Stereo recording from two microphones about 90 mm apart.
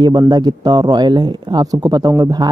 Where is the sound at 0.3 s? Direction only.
50° right (ahead or behind).